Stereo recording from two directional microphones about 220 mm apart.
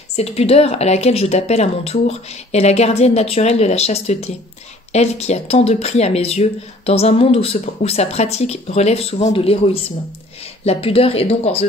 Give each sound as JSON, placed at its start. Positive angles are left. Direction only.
{"t": 0.1, "sound": "speech", "side_deg": 30}